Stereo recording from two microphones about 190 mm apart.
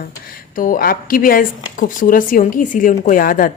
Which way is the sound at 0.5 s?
45° left (ahead or behind).